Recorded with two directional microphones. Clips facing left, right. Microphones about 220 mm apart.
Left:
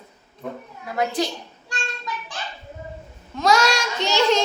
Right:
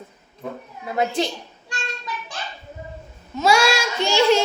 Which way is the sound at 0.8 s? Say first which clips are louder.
Right 1 dB; 25° right (ahead or behind).